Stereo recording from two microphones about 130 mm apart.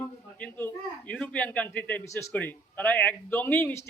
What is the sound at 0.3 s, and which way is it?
A man's voice, 10° left (ahead or behind).